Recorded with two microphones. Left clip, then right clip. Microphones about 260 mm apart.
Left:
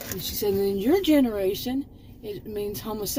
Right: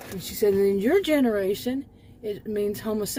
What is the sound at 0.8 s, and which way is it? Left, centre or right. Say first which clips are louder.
Speech: even; right.